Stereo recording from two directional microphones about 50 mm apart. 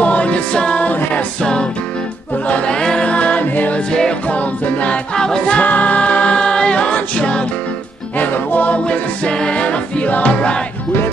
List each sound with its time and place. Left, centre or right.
0.0 s music: left
1.4 s music: centre
2.3 s a capella: left
3.4 s music: left
3.9 s music: centre
4.3 s music: left
5.1 s a capella: centre
8.2 s music: left
8.8 s music: left